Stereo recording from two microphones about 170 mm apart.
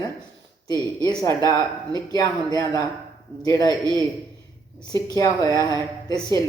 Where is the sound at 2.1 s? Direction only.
20° left (ahead or behind).